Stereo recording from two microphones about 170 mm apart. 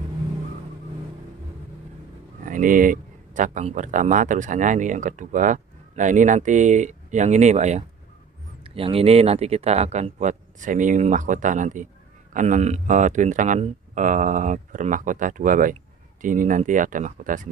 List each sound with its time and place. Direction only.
2.4 s speech: 50° right (ahead or behind)